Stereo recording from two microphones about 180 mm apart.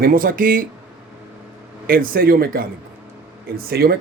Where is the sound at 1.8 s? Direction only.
55° right (ahead or behind).